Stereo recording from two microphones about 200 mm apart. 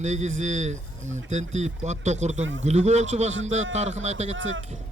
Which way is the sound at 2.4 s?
70° right (ahead or behind).